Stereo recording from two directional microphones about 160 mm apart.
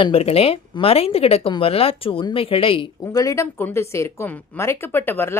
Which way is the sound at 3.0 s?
20° left (ahead or behind).